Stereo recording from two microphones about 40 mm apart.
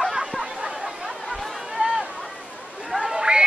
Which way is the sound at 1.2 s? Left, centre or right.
Centre.